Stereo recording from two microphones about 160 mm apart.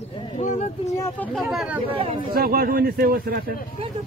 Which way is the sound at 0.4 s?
50° left (ahead or behind).